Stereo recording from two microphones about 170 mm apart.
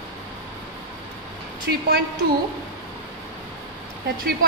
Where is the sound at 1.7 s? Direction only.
75° right (ahead or behind).